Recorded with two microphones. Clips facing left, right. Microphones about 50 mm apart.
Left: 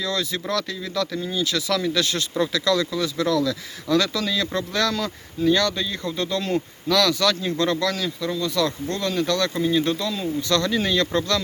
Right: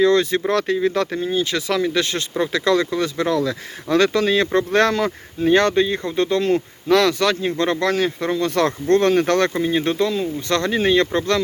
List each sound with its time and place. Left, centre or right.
0.0 s speech: right
9.6 s speech: right